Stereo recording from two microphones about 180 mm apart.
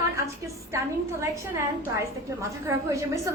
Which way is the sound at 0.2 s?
15° right (ahead or behind).